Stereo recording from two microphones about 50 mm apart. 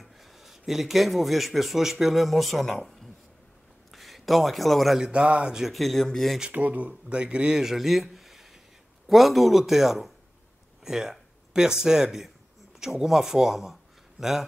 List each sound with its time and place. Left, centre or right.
0.0 s a man's voice: centre
4.9 s a man's voice: centre
5.5 s speech: centre
6.5 s speech: right
7.1 s a man's voice: right
7.6 s a sound: centre
9.0 s speech: centre
10.8 s a sound: centre
11.8 s speech: centre